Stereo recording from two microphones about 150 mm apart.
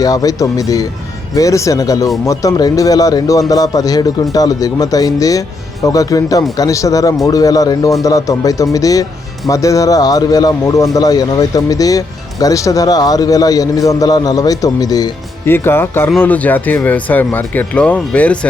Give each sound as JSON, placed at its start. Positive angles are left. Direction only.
{"t": 0.0, "sound": "a man's voice", "side_deg": 25}